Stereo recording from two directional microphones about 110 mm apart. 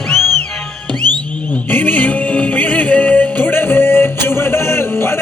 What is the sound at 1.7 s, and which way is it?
Music, 15° left (ahead or behind).